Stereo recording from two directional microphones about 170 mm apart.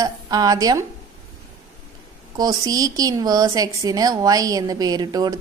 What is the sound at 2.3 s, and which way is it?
A woman's voice, 20° right (ahead or behind).